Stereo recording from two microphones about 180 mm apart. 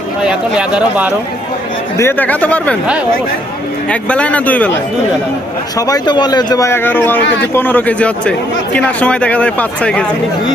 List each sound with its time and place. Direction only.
0.2 s speech: 5° right (ahead or behind)
2.0 s speech: 10° left (ahead or behind)
3.8 s speech: 5° left (ahead or behind)
5.7 s speech: 20° left (ahead or behind)